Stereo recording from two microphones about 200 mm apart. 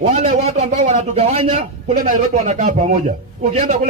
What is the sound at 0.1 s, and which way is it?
A man's voice, 30° right (ahead or behind).